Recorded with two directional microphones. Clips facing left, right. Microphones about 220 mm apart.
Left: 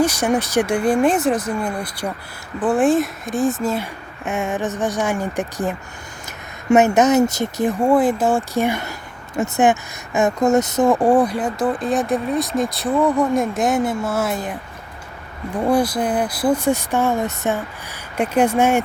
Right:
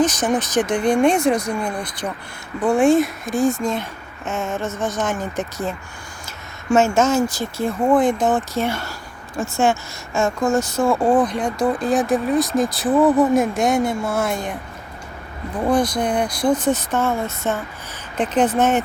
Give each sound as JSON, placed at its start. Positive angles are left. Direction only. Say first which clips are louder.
{"t": 0.0, "sound": "speech", "louder": "left 1 dB", "side_deg": 10}
{"t": 15.5, "sound": "speech", "louder": "left 1 dB", "side_deg": 10}